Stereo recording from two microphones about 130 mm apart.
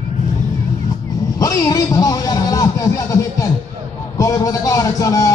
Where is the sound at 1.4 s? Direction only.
25° left (ahead or behind).